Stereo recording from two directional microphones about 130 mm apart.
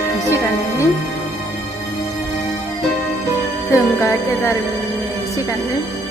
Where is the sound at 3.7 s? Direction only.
20° left (ahead or behind).